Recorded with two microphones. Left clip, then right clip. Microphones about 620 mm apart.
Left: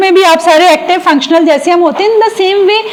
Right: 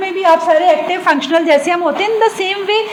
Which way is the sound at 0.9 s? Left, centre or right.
Left.